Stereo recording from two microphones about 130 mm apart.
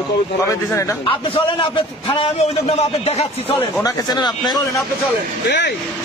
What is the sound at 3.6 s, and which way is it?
A man's voice, 30° left (ahead or behind).